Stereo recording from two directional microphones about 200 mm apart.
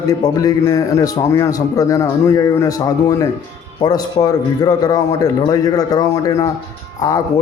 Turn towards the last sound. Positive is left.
turn(degrees=15)  # may be behind; listen again after turning